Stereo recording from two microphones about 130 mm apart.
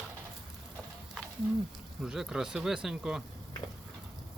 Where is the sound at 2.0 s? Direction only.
5° right (ahead or behind).